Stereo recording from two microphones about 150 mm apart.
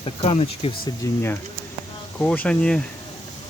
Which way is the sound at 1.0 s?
15° left (ahead or behind).